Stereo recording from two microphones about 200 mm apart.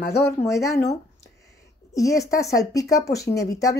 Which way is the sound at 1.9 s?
15° left (ahead or behind).